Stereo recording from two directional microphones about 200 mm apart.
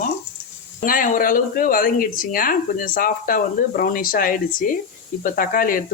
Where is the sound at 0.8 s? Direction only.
40° left (ahead or behind).